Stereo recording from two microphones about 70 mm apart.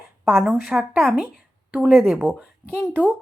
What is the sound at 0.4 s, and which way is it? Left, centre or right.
Speech, centre.